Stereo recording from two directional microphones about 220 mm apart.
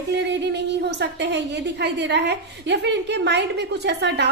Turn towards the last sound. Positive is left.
turn(degrees=-50)  # may be behind; listen again after turning